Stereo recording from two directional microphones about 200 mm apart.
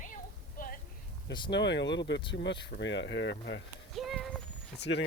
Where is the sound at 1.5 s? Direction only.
60° left (ahead or behind).